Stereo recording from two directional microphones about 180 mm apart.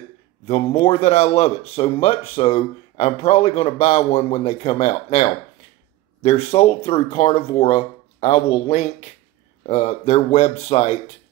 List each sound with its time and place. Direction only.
0.5 s speech: 35° left (ahead or behind)